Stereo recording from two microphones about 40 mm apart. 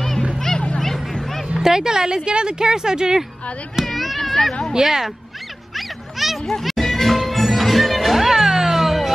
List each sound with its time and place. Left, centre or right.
0.7 s a sound: centre
1.6 s speech: centre
3.8 s speech: centre
4.7 s speech: centre
5.8 s a sound: centre
6.6 s music: centre